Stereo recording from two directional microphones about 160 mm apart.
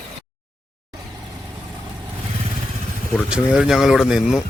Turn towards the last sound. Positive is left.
turn(degrees=-5)  # may be behind; listen again after turning